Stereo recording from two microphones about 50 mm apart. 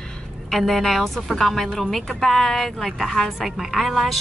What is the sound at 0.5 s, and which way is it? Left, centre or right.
A woman's voice, centre.